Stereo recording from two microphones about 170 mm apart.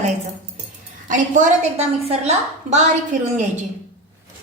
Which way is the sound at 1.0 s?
50° right (ahead or behind).